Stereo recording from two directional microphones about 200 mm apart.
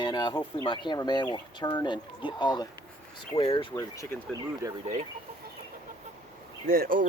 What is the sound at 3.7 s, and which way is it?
Speech, 15° left (ahead or behind).